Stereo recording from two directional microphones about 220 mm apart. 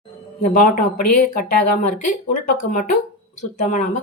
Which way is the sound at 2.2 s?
35° left (ahead or behind).